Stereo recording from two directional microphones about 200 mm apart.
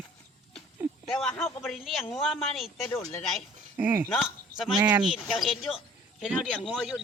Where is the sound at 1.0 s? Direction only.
5° left (ahead or behind).